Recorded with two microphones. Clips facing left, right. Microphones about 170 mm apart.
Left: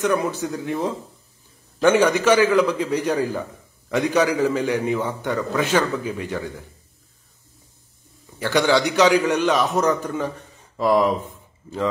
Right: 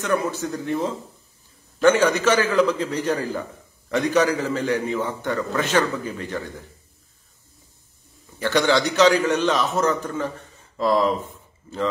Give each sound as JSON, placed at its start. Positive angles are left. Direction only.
{"t": 0.0, "sound": "a man's voice", "side_deg": 15}
{"t": 8.4, "sound": "a man's voice", "side_deg": 10}